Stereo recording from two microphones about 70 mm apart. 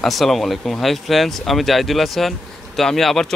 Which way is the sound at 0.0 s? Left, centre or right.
Centre.